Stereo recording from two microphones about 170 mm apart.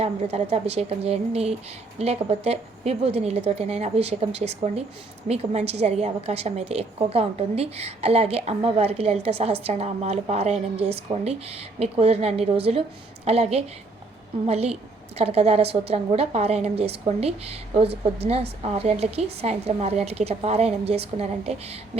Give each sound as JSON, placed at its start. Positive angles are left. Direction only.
{"t": 0.0, "sound": "a woman's voice", "side_deg": -40}